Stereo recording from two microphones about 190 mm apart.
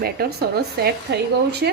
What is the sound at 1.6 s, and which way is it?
Speech, 60° right (ahead or behind).